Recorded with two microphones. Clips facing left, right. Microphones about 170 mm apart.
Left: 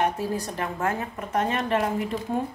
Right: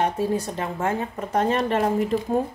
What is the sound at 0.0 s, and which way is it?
A woman's voice, 25° right (ahead or behind).